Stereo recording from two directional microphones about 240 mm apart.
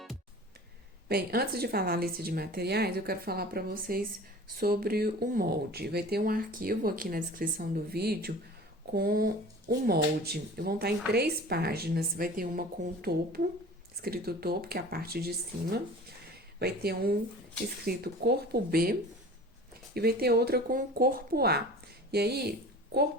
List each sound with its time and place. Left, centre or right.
1.0 s speech: right